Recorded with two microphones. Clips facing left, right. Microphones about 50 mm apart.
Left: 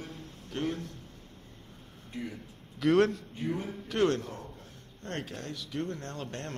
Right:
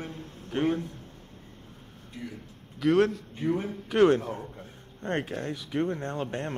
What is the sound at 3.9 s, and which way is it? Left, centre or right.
Speech, centre.